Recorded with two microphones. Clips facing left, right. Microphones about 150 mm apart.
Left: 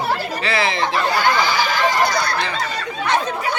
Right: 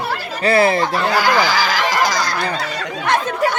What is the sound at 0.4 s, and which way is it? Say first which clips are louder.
Fowl: right 8 dB; 45° right (ahead or behind).